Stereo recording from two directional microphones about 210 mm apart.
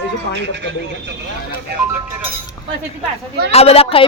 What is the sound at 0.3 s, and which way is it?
Speech, 55° right (ahead or behind).